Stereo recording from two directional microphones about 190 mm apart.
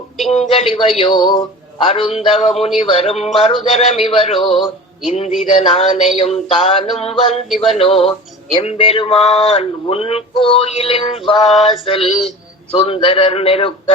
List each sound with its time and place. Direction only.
0.3 s male singing: 30° left (ahead or behind)
1.8 s a man's voice: 30° left (ahead or behind)
6.8 s music: centre (ahead or behind)
7.1 s a man's voice: 30° left (ahead or behind)
7.8 s male singing: 30° left (ahead or behind)